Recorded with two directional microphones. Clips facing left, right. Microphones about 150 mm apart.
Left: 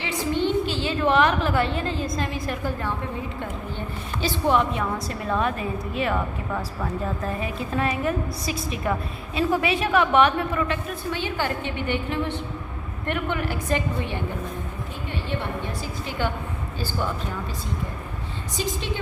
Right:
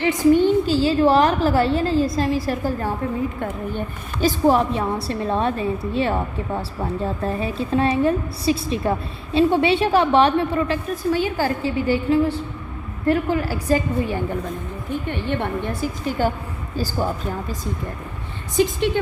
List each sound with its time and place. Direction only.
0.4 s a woman's voice: 40° right (ahead or behind)
3.4 s a woman's voice: 45° right (ahead or behind)
15.1 s a woman's voice: 55° right (ahead or behind); by 17.1 s 40° right (ahead or behind)